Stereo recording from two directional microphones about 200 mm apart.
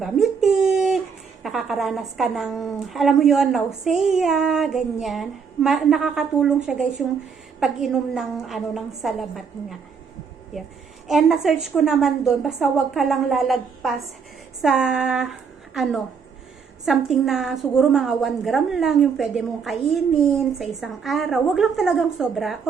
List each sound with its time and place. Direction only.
0.0 s a woman's voice: centre (ahead or behind)
11.1 s a woman's voice: centre (ahead or behind)